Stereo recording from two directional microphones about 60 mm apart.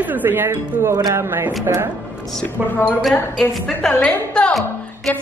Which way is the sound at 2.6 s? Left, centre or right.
Left.